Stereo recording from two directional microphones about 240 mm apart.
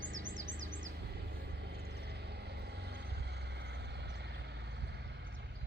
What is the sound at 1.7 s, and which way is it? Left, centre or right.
Vehicle, right.